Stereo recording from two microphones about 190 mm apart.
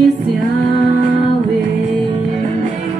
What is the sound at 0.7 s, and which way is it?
Music, 45° right (ahead or behind).